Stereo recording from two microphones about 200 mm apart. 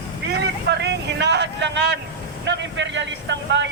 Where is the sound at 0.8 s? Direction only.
60° right (ahead or behind).